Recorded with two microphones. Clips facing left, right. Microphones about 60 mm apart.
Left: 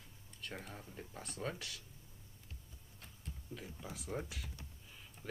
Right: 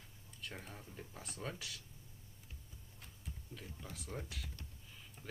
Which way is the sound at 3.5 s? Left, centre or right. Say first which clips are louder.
Left 4 dB; centre.